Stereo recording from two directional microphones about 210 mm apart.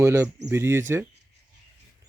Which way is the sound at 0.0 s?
15° right (ahead or behind).